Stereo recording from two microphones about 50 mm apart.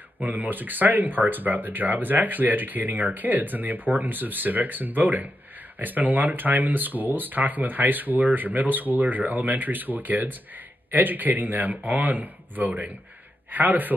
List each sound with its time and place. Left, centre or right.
0.2 s speech: right